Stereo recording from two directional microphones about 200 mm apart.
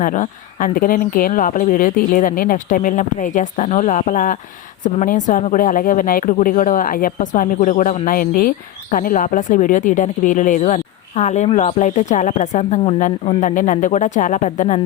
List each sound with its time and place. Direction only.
0.0 s speech: 40° left (ahead or behind)